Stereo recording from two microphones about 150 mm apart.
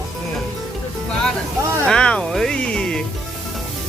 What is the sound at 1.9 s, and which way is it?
Speech, 5° left (ahead or behind).